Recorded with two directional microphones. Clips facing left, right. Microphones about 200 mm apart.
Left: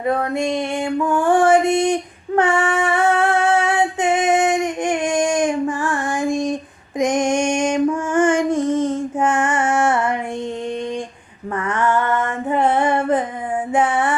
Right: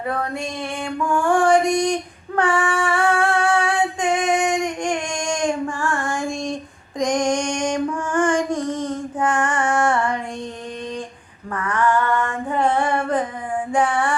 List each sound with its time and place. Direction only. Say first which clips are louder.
0.5 s a sound: left 6 dB; 20° left (ahead or behind)
1.6 s singing: left 2 dB; 20° left (ahead or behind)
4.0 s child singing: left 4 dB; 20° left (ahead or behind)
9.1 s female singing: right 1 dB; 25° left (ahead or behind)
11.6 s female singing: even; 25° left (ahead or behind)
13.7 s music: left 2 dB; 20° left (ahead or behind)